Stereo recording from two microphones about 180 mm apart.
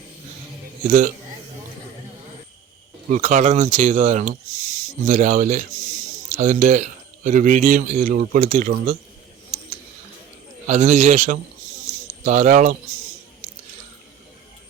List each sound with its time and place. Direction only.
0.9 s speech: 45° right (ahead or behind)
3.1 s speech: 40° right (ahead or behind)
10.7 s speech: 40° right (ahead or behind)